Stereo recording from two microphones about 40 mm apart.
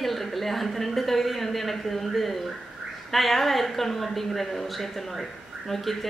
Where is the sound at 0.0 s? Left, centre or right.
Centre.